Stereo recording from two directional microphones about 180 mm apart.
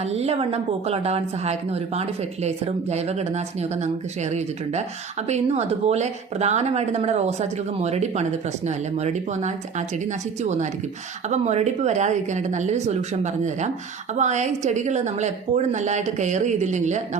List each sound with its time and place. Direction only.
0.1 s speech: 35° right (ahead or behind)